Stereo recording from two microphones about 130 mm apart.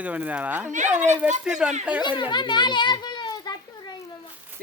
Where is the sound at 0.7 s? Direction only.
70° right (ahead or behind).